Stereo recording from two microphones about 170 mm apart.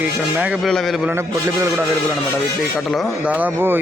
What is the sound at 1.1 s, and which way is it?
Speech, 15° right (ahead or behind).